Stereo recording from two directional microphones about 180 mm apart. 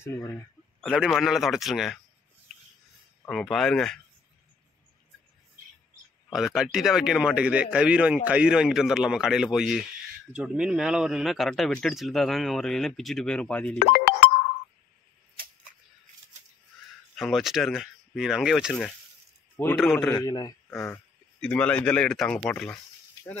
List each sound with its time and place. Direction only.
0.0 s a man's voice: 15° left (ahead or behind)
0.7 s speech: centre (ahead or behind)
3.3 s speech: centre (ahead or behind)
6.3 s speech: centre (ahead or behind)
17.1 s speech: centre (ahead or behind)
19.6 s a man's voice: 10° left (ahead or behind)
20.8 s speech: 10° left (ahead or behind)